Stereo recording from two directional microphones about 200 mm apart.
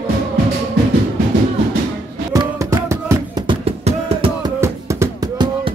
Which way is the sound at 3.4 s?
30° right (ahead or behind).